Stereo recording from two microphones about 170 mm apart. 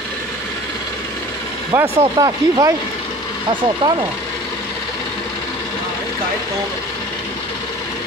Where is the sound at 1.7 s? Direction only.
10° right (ahead or behind).